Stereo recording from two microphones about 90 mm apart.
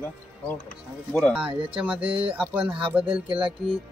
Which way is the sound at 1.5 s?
85° right.